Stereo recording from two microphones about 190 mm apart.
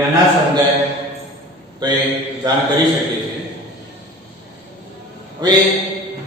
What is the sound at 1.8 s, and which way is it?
Speech, 20° right (ahead or behind).